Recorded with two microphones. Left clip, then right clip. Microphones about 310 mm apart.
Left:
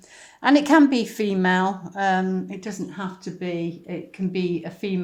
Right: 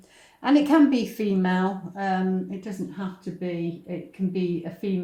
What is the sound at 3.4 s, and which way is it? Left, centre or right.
Speech, left.